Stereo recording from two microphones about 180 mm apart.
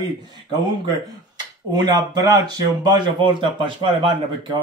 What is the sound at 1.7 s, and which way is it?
Speech, 20° right (ahead or behind).